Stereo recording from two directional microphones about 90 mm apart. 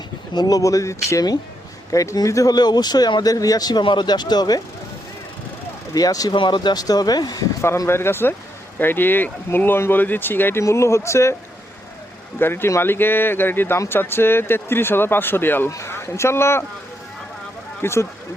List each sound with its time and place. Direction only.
0.3 s speech: 45° left (ahead or behind)
5.9 s speech: 45° left (ahead or behind)
6.3 s speech: 60° left (ahead or behind)
7.9 s speech: 25° left (ahead or behind)
12.4 s speech: 25° left (ahead or behind)
17.8 s speech: 30° left (ahead or behind)